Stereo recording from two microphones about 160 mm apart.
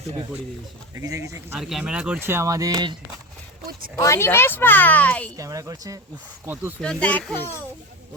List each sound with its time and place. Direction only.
0.9 s speech: 20° right (ahead or behind)
1.5 s speech: centre (ahead or behind); by 2.9 s 25° right (ahead or behind)
3.7 s speech: 65° right (ahead or behind)
3.9 s speech: 20° left (ahead or behind)
5.4 s speech: 20° right (ahead or behind)
6.8 s speech: 10° left (ahead or behind)